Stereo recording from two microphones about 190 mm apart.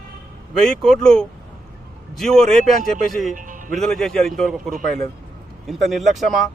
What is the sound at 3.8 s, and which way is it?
A man's voice, centre (ahead or behind).